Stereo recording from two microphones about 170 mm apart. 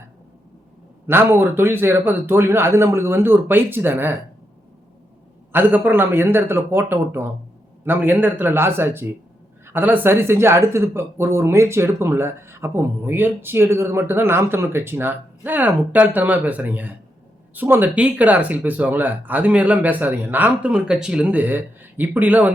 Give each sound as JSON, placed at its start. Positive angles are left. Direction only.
{"t": 1.0, "sound": "speech", "side_deg": -15}
{"t": 5.5, "sound": "speech", "side_deg": -10}